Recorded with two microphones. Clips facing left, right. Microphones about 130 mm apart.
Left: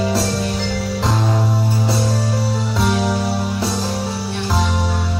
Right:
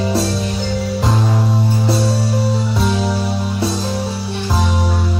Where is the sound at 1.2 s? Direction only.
15° left (ahead or behind).